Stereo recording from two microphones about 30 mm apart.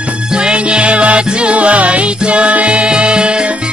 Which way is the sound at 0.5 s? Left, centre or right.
Right.